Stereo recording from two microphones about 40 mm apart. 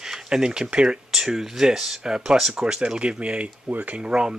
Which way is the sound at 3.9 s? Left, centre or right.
Right.